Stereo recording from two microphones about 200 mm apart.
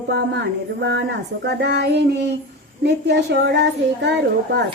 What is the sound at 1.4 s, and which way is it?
Speech, 55° right (ahead or behind).